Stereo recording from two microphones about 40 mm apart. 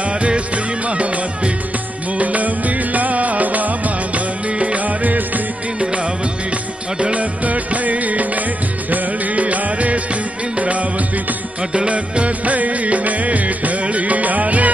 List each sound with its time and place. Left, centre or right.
0.8 s music: right
7.0 s music: right
11.9 s music of bollywood: right